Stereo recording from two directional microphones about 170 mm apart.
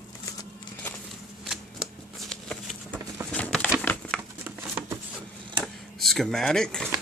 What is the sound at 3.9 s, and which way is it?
Crumpling, 15° left (ahead or behind).